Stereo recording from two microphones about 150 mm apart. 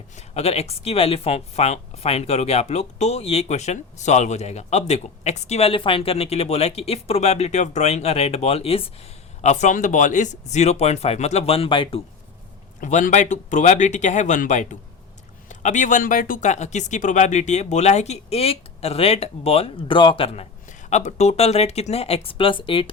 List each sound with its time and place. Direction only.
0.2 s speech: 45° left (ahead or behind)
9.4 s speech: 50° left (ahead or behind)
12.8 s speech: 55° left (ahead or behind); by 20.5 s 40° left (ahead or behind)
20.7 s speech: 50° left (ahead or behind); by 22.9 s 35° left (ahead or behind)